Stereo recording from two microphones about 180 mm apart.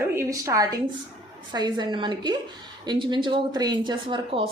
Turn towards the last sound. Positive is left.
turn(degrees=-30)  # may be behind; listen again after turning